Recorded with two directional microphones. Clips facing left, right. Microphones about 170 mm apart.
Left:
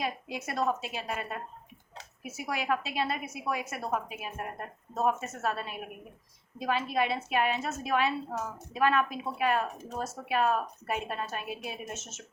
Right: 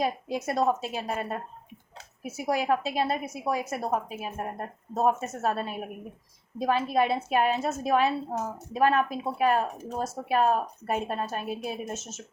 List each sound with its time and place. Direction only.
0.0 s a woman's voice: 40° right (ahead or behind)